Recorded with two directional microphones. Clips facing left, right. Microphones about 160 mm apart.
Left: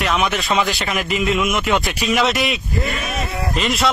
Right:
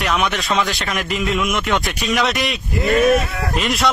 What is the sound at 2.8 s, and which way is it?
Speech, 65° right (ahead or behind).